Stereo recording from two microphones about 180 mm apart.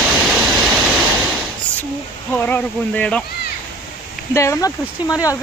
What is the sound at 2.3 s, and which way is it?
Speech, 10° left (ahead or behind).